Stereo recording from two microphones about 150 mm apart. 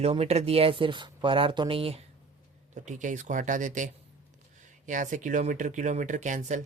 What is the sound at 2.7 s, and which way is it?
Speech, 55° right (ahead or behind).